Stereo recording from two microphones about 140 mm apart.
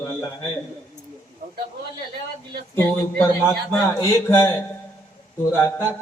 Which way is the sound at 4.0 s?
20° left (ahead or behind).